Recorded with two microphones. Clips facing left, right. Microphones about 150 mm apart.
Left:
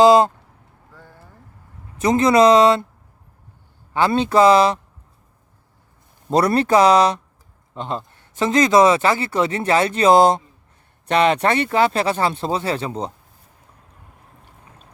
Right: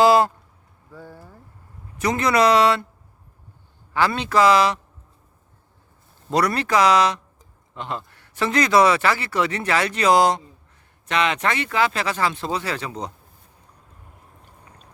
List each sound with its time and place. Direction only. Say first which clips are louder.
0.0 s speech: left 4 dB; 20° left (ahead or behind)
0.9 s vehicle: right 6 dB; 10° right (ahead or behind)
2.0 s speech: left 5 dB; 25° left (ahead or behind)
3.9 s speech: left 4 dB; 25° left (ahead or behind)
6.3 s speech: left 5 dB; 30° left (ahead or behind)